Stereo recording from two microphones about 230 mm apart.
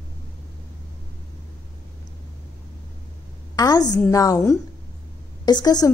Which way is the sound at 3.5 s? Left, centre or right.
Centre.